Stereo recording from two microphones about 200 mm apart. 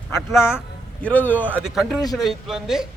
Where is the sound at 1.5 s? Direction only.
Centre (ahead or behind).